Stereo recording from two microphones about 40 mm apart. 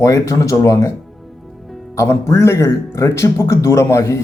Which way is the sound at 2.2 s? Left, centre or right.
Left.